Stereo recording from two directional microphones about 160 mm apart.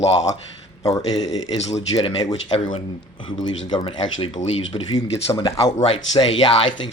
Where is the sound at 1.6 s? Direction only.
40° left (ahead or behind).